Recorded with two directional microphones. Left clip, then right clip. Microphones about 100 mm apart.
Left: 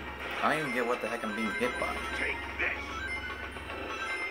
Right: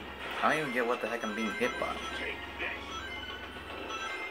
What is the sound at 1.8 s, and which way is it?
Speech, 15° right (ahead or behind).